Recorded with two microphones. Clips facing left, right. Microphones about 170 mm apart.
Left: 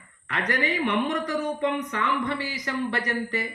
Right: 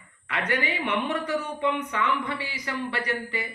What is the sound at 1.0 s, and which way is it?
Speech, 40° left (ahead or behind).